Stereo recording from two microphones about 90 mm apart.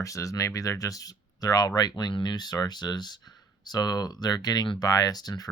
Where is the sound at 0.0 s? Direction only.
35° left (ahead or behind).